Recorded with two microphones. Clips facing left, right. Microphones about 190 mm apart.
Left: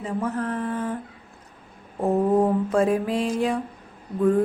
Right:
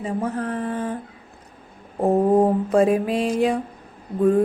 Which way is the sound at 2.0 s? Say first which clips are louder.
Right 3 dB; 35° right (ahead or behind).